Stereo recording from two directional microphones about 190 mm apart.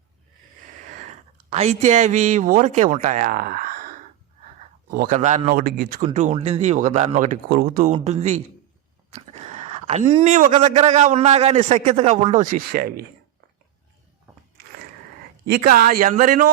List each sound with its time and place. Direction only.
0.9 s speech: 40° right (ahead or behind)
6.1 s a man's voice: 35° right (ahead or behind)
7.5 s speech: 50° right (ahead or behind)
7.9 s a man's voice: 35° right (ahead or behind)
9.0 s a sound: 35° right (ahead or behind)
10.7 s a man's voice: 35° right (ahead or behind)
12.2 s speech: 40° right (ahead or behind)
14.3 s a sound: 15° right (ahead or behind)
15.4 s speech: 55° right (ahead or behind)